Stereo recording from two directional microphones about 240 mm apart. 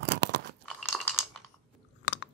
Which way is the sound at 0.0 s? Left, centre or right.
Right.